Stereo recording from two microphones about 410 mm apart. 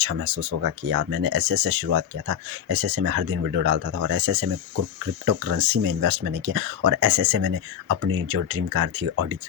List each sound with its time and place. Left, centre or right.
0.0 s speech: right